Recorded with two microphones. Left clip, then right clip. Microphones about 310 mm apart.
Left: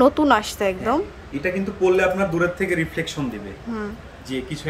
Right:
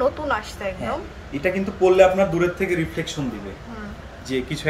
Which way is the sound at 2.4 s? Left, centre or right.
Centre.